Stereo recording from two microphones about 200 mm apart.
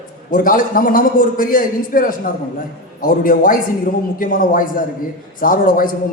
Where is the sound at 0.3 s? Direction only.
45° left (ahead or behind).